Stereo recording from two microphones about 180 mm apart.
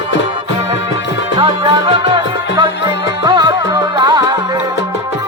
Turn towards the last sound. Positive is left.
turn(degrees=-25)  # may be behind; listen again after turning